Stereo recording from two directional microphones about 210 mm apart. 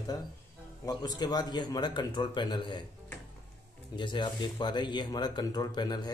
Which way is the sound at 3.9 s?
20° left (ahead or behind).